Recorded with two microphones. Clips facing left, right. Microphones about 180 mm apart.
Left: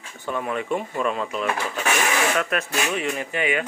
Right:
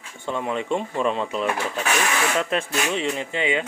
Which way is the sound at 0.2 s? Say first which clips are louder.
Right 1 dB; 20° right (ahead or behind).